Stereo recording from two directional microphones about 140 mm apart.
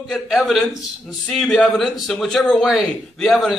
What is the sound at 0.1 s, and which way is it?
A man's voice, centre (ahead or behind).